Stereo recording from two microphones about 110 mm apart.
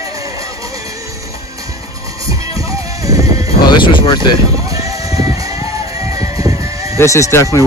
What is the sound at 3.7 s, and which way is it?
Speech, 50° left (ahead or behind).